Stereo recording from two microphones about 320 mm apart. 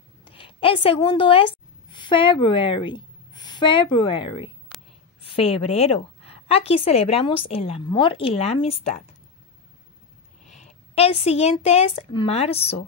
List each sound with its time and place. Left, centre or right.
0.2 s a woman's voice: centre
10.5 s a woman's voice: centre